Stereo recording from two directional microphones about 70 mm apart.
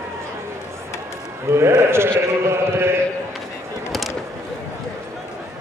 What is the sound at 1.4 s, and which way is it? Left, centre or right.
Sheep, right.